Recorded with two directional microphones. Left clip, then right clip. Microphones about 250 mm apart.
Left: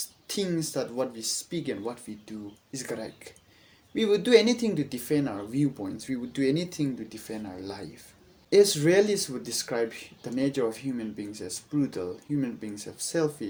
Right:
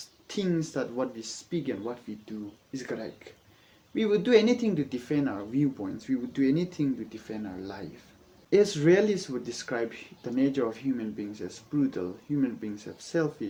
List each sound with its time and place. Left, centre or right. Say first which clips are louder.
0.3 s speech: even; left